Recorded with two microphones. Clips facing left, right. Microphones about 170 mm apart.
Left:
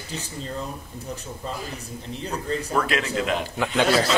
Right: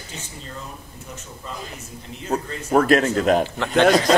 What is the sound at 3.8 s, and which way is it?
Speech, 45° right (ahead or behind).